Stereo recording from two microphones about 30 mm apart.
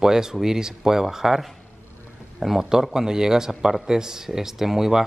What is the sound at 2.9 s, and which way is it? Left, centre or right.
Speech, right.